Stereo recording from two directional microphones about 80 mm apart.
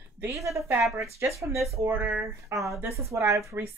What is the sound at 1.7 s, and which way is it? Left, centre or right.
Speech, right.